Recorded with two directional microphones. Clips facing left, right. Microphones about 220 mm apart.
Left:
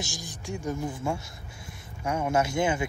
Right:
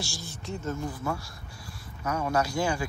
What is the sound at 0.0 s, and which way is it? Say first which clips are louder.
Speech: left 1 dB; 15° left (ahead or behind).